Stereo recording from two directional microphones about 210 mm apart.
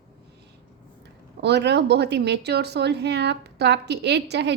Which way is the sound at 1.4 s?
55° right (ahead or behind).